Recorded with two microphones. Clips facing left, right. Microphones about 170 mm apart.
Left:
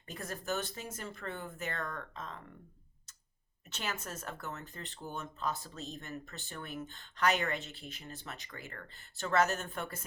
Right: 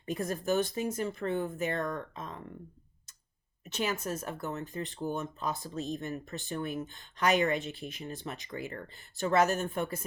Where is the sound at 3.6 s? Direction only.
15° right (ahead or behind).